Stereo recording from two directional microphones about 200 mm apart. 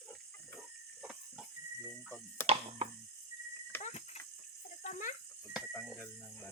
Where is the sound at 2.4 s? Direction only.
30° right (ahead or behind).